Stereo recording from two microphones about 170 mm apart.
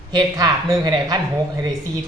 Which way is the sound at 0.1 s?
20° right (ahead or behind).